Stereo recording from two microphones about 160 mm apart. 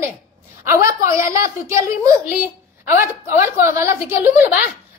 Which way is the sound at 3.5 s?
15° right (ahead or behind).